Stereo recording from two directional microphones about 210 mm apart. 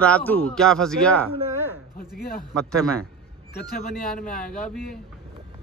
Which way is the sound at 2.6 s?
5° left (ahead or behind).